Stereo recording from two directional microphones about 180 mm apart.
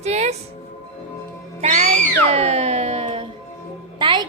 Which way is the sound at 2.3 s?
35° right (ahead or behind).